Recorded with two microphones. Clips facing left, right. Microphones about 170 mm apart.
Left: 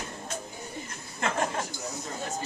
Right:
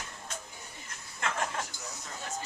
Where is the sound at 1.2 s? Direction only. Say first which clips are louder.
Left 5 dB; 40° left (ahead or behind).